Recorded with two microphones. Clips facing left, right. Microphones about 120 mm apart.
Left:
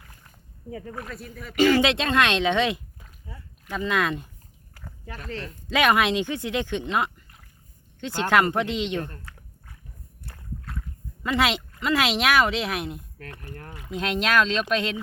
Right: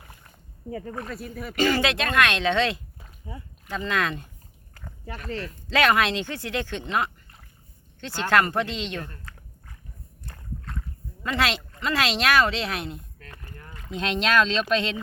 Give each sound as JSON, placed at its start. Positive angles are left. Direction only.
{"t": 0.7, "sound": "speech", "side_deg": 0}
{"t": 1.8, "sound": "speech", "side_deg": 25}
{"t": 3.3, "sound": "speech", "side_deg": -15}
{"t": 3.7, "sound": "speech", "side_deg": 10}
{"t": 4.8, "sound": "a sound", "side_deg": 0}
{"t": 5.6, "sound": "speech", "side_deg": 15}
{"t": 9.3, "sound": "dog", "side_deg": 15}
{"t": 10.2, "sound": "a sound", "side_deg": 10}
{"t": 13.5, "sound": "speech", "side_deg": 60}
{"t": 13.7, "sound": "speech", "side_deg": 10}